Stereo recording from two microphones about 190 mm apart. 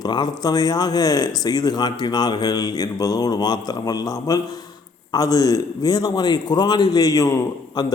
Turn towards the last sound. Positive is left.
turn(degrees=20)  # may be behind; listen again after turning